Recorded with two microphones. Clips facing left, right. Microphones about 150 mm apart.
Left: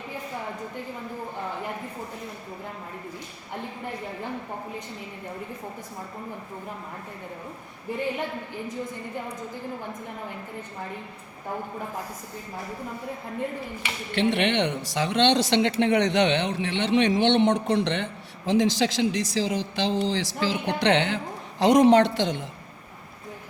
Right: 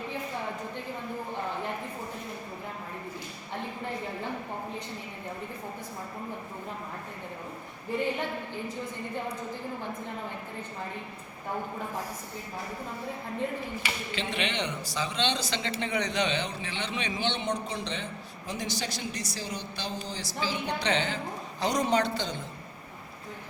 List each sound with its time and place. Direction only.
14.1 s speech: 65° left (ahead or behind)
21.6 s a woman's voice: 90° left